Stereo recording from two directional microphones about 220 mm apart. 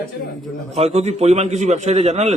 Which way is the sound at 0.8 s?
30° right (ahead or behind).